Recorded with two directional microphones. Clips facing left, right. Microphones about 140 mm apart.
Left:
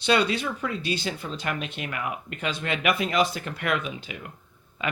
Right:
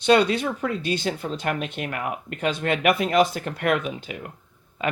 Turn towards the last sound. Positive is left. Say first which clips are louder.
# right 4 dB
turn(degrees=-45)  # may be behind; listen again after turning